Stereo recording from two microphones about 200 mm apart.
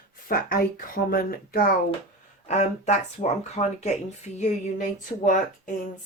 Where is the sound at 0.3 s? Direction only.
50° left (ahead or behind).